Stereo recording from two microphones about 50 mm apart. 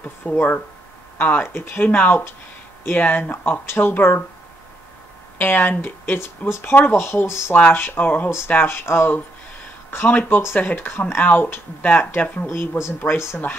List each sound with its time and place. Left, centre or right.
0.2 s speech: left
5.4 s speech: left
7.5 s speech: left
8.6 s speech: left
12.4 s speech: left